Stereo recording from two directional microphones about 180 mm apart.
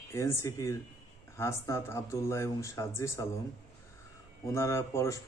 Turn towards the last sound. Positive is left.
turn(degrees=15)  # may be behind; listen again after turning